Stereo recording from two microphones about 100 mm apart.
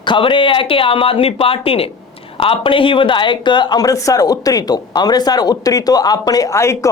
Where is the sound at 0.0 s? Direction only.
55° left (ahead or behind).